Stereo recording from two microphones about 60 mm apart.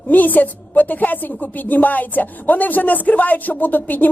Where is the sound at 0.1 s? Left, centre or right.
Left.